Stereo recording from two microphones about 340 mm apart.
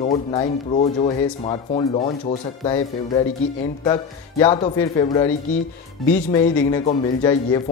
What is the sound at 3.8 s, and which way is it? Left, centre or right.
Speech, centre.